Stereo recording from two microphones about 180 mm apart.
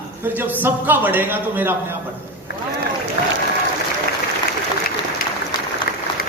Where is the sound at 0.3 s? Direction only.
10° right (ahead or behind).